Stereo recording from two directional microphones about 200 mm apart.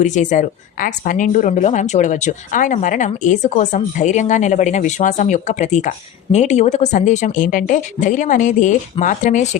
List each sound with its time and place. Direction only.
0.0 s a woman's voice: 40° left (ahead or behind)